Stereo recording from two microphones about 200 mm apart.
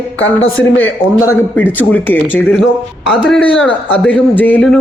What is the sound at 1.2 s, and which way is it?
Speech, 10° left (ahead or behind).